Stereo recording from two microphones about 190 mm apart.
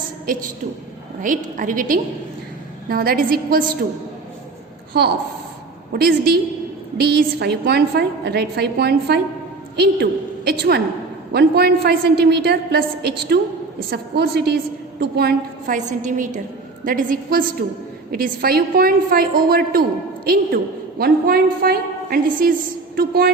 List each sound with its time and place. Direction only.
0.3 s a woman's voice: 50° right (ahead or behind)
5.9 s a woman's voice: 55° right (ahead or behind)